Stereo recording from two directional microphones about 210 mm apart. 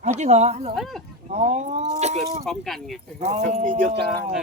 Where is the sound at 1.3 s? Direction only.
30° right (ahead or behind).